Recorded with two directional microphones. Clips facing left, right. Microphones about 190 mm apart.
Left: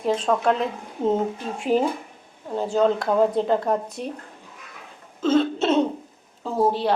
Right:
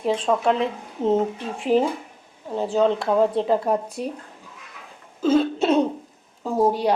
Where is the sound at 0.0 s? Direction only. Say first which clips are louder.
Even; 5° right (ahead or behind).